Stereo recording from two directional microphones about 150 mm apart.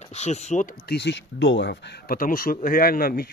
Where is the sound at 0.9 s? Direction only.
90° left.